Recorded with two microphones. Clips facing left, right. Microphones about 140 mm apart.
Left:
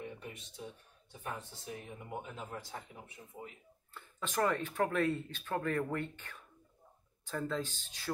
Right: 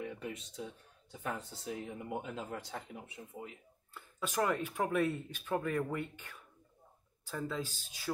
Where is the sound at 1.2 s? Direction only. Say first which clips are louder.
Right 3 dB; 80° right.